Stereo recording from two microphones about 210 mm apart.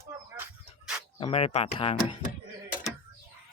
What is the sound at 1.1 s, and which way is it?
Speech, 25° left (ahead or behind).